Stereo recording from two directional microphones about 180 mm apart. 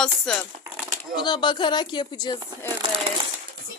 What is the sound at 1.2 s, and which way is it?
Speech, 25° left (ahead or behind).